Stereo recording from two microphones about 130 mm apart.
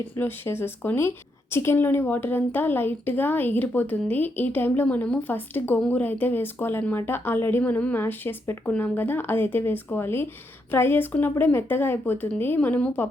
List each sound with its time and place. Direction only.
0.2 s speech: 15° left (ahead or behind)